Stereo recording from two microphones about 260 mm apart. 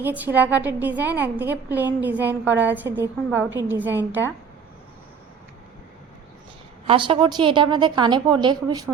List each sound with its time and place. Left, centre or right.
0.0 s a woman's voice: centre
6.8 s a woman's voice: centre